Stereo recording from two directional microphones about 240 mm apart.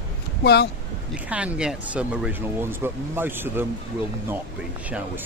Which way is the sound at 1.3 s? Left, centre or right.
Centre.